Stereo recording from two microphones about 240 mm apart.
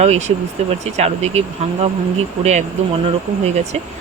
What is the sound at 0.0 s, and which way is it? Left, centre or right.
Speech, right.